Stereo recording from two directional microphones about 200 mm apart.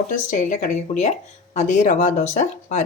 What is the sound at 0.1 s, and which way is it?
A woman's voice, 40° left (ahead or behind).